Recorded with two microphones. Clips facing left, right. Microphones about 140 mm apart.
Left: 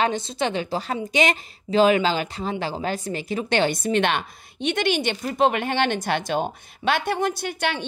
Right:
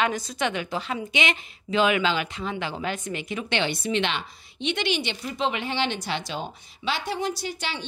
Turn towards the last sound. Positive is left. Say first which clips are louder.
# left 5 dB
turn(degrees=55)  # may be behind; listen again after turning